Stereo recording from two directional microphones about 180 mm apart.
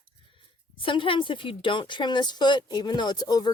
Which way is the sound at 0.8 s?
30° left (ahead or behind).